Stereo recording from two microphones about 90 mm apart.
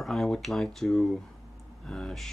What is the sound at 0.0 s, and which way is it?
Speech, 5° left (ahead or behind).